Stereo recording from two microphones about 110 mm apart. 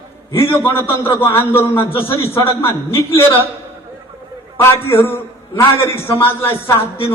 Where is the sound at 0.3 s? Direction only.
20° left (ahead or behind).